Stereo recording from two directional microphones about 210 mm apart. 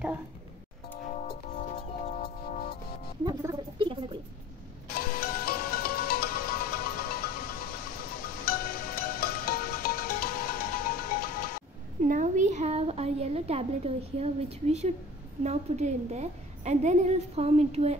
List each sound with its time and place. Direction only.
1.2 s music: 50° left (ahead or behind)
1.6 s music: 35° left (ahead or behind)
3.4 s a sound: 25° right (ahead or behind)
4.9 s music: 45° left (ahead or behind)
12.0 s a sound: 35° right (ahead or behind)
15.4 s a woman's voice: 30° right (ahead or behind)